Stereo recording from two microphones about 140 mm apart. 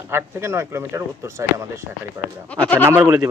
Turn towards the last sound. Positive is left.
turn(degrees=-20)  # may be behind; listen again after turning